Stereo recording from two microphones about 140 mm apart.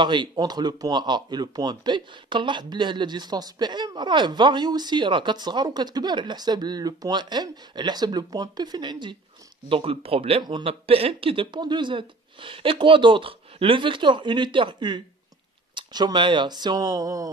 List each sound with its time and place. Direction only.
0.0 s speech: 35° right (ahead or behind)
9.7 s speech: 40° right (ahead or behind); by 17.3 s 25° right (ahead or behind)